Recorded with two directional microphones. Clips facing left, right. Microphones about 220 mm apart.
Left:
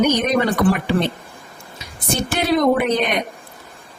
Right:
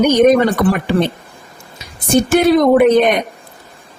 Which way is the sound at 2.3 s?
50° right (ahead or behind).